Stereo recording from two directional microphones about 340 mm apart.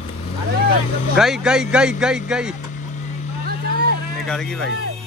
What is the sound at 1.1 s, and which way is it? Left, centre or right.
Speech, centre.